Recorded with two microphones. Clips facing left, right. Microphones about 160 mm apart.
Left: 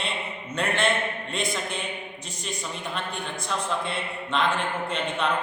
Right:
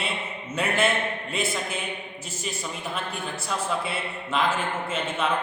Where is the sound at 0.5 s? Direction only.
5° right (ahead or behind).